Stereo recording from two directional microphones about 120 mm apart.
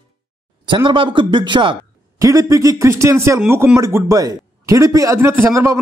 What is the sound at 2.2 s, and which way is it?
A man's voice, 30° right (ahead or behind).